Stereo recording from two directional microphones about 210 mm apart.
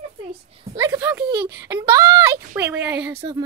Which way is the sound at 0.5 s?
15° right (ahead or behind).